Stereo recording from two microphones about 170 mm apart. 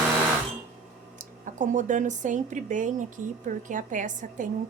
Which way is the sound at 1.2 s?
50° right (ahead or behind).